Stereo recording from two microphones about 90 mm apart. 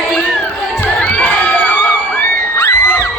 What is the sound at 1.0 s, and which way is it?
Crowd, 20° left (ahead or behind).